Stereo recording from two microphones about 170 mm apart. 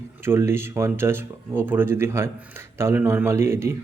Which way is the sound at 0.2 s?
15° right (ahead or behind).